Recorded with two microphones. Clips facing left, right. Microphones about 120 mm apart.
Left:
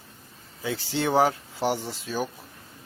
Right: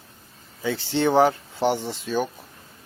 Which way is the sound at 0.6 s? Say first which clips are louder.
Right 5 dB; 5° left (ahead or behind).